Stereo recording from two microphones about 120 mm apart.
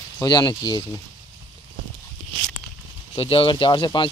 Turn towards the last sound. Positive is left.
turn(degrees=45)  # may be behind; listen again after turning